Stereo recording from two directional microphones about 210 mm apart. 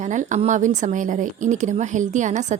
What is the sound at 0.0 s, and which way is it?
A woman's voice, 35° right (ahead or behind).